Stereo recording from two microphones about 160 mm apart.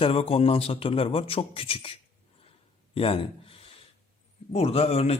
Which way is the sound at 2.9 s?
35° left (ahead or behind).